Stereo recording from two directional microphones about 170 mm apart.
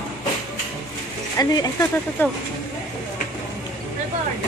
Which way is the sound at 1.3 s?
20° left (ahead or behind).